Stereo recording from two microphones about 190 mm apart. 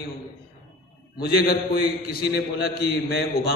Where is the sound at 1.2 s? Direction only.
55° left (ahead or behind).